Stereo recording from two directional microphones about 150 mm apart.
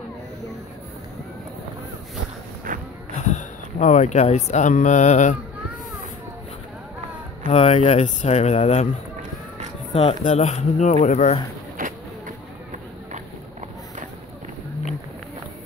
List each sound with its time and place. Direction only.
2.7 s a sound: 65° right (ahead or behind)
3.2 s speech: 50° left (ahead or behind)
7.5 s speech: 40° left (ahead or behind)
9.9 s speech: 45° left (ahead or behind)
11.8 s vehicle: 65° right (ahead or behind)